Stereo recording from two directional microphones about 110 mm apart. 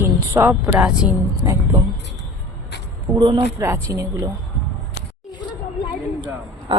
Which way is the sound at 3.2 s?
45° right (ahead or behind).